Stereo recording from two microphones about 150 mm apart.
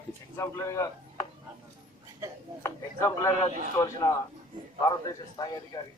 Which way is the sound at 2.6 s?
20° left (ahead or behind).